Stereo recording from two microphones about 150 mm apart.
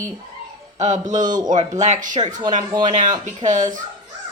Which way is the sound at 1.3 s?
25° right (ahead or behind).